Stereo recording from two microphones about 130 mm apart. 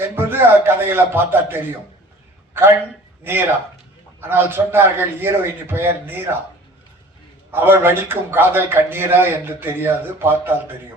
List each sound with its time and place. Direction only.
0.0 s a man's voice: 15° right (ahead or behind)
7.5 s a man's voice: 15° right (ahead or behind)